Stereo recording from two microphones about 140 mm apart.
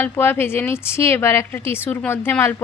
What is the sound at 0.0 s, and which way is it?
Speech, 15° left (ahead or behind).